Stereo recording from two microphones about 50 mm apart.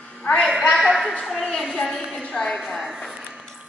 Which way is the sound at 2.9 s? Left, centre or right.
Centre.